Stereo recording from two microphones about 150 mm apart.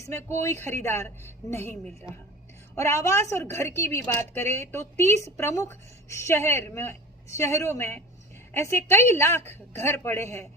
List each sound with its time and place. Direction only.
0.0 s a woman's voice: 20° left (ahead or behind)
2.7 s a woman's voice: 20° left (ahead or behind)